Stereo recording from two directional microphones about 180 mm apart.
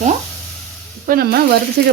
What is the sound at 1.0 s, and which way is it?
Speech, 55° right (ahead or behind).